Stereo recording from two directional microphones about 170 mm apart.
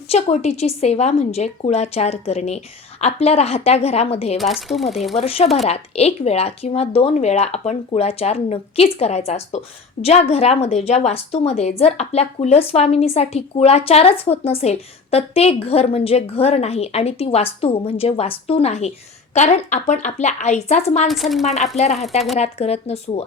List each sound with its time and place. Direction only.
0.1 s a woman's voice: 40° left (ahead or behind)
4.4 s speech: centre (ahead or behind)
5.2 s a woman's voice: 35° left (ahead or behind)
21.1 s speech: centre (ahead or behind)
21.4 s a woman's voice: 40° left (ahead or behind)